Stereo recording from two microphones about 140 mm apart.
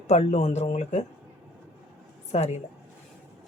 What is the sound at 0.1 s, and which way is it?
Speech, 50° left (ahead or behind).